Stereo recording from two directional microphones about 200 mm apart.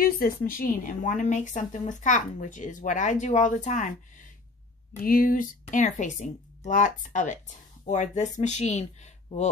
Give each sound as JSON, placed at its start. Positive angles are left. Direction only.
{"t": 0.0, "sound": "a woman's voice", "side_deg": 45}
{"t": 5.0, "sound": "a woman's voice", "side_deg": 45}